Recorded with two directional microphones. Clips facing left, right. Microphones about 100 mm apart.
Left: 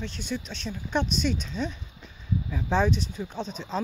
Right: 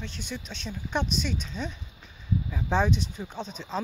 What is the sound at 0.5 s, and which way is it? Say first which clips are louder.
Speech: left 1 dB; 15° right (ahead or behind).